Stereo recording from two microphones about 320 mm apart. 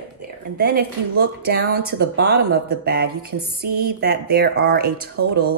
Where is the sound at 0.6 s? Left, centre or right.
Right.